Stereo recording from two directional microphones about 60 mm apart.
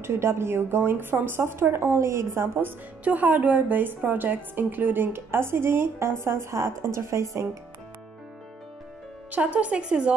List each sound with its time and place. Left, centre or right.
0.0 s speech: right
3.0 s a woman's voice: right
9.3 s a woman's voice: right